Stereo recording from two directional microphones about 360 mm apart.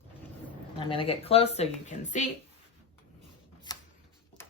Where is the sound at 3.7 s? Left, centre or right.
Centre.